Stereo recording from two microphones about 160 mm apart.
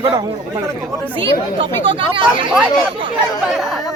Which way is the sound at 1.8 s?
30° right (ahead or behind).